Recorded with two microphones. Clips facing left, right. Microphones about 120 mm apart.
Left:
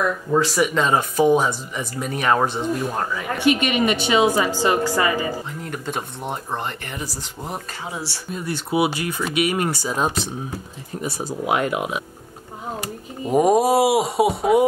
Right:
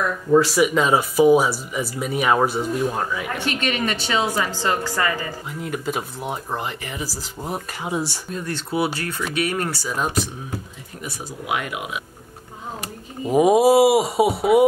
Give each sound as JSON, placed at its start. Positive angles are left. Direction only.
{"t": 0.3, "sound": "speech", "side_deg": 0}
{"t": 3.3, "sound": "a woman's voice", "side_deg": 15}
{"t": 5.5, "sound": "speech", "side_deg": -5}
{"t": 7.8, "sound": "speech", "side_deg": -20}
{"t": 8.3, "sound": "a woman's voice", "side_deg": 10}
{"t": 13.2, "sound": "speech", "side_deg": 0}